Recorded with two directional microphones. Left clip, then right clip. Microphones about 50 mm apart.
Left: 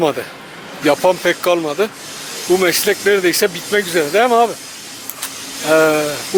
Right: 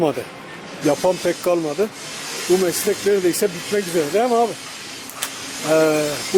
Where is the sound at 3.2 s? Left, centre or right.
Right.